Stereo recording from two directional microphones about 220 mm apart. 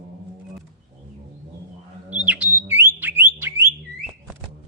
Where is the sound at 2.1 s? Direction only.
5° right (ahead or behind).